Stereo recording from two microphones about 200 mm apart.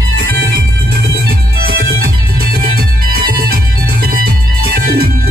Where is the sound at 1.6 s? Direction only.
50° right (ahead or behind).